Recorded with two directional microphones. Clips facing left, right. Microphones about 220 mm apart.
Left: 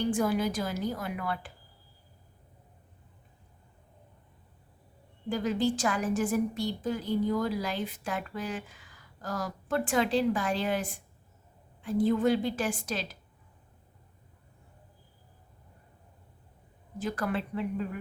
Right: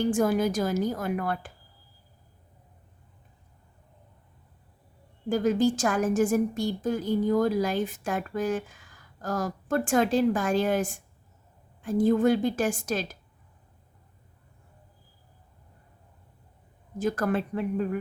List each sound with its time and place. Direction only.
0.0 s a woman's voice: 45° right (ahead or behind)
5.3 s a woman's voice: 45° right (ahead or behind)
17.0 s a woman's voice: 45° right (ahead or behind)